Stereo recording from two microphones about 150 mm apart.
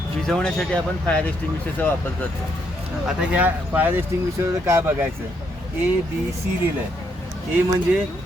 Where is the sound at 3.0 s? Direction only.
5° right (ahead or behind).